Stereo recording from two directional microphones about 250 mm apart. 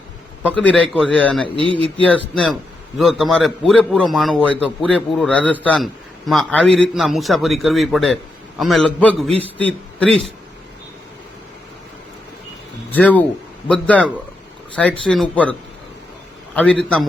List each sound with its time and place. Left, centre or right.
0.4 s a man's voice: centre
1.5 s speech: centre
2.0 s a man's voice: centre
12.9 s a man's voice: centre
16.6 s a man's voice: centre